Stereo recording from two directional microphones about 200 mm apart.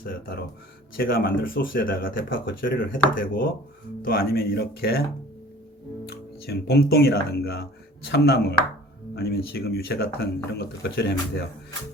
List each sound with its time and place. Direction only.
0.0 s speech: 45° left (ahead or behind)
6.1 s speech: 50° left (ahead or behind)